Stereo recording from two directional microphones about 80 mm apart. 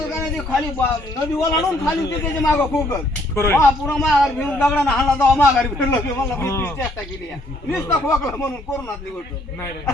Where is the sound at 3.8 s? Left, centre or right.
Centre.